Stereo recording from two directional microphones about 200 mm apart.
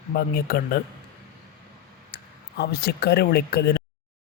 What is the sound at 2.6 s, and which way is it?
Speech, 55° left (ahead or behind).